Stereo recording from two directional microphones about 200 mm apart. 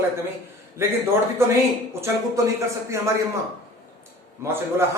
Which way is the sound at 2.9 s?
15° right (ahead or behind).